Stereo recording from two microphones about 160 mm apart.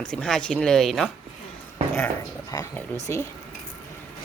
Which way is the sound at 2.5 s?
25° left (ahead or behind).